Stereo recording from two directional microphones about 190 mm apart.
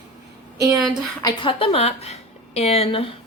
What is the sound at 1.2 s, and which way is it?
A woman's voice, 25° left (ahead or behind).